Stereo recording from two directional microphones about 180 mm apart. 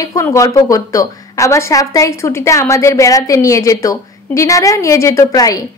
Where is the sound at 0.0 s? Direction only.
15° left (ahead or behind).